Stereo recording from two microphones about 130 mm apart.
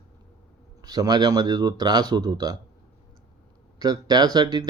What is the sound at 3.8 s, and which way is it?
Speech, 30° right (ahead or behind).